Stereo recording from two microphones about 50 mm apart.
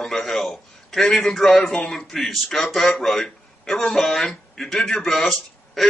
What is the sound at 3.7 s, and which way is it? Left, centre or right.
A man's voice, centre.